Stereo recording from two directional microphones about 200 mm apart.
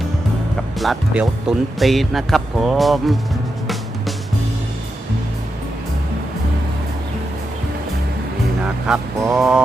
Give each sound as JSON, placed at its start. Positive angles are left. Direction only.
{"t": 0.8, "sound": "speech", "side_deg": 0}
{"t": 8.9, "sound": "speech", "side_deg": -5}